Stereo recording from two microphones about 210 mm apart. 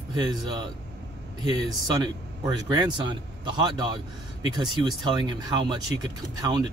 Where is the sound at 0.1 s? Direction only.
20° right (ahead or behind).